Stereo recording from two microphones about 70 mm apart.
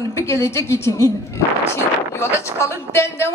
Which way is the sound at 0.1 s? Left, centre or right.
Left.